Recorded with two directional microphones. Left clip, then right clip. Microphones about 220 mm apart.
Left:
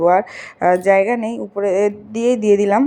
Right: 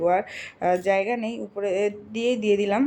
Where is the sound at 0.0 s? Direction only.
20° left (ahead or behind).